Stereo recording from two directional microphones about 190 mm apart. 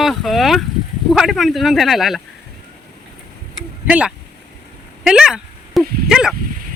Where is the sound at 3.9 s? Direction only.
5° right (ahead or behind).